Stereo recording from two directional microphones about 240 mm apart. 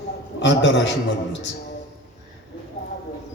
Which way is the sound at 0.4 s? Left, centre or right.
Left.